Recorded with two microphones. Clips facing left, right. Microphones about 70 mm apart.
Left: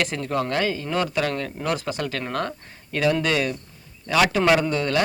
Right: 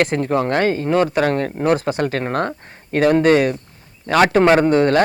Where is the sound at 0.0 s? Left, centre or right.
Right.